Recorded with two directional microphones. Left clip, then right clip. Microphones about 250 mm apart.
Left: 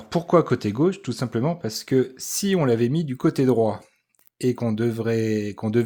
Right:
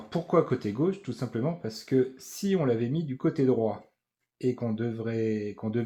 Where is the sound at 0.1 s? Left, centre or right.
Left.